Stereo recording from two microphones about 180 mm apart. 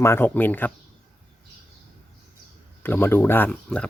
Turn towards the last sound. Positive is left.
turn(degrees=5)  # may be behind; listen again after turning